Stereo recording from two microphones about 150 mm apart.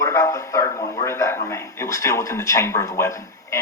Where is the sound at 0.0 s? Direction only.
20° left (ahead or behind).